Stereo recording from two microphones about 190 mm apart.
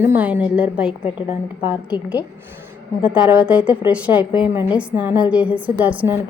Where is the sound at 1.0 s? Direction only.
30° left (ahead or behind).